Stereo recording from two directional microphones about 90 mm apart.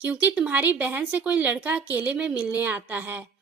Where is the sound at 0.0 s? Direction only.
15° right (ahead or behind).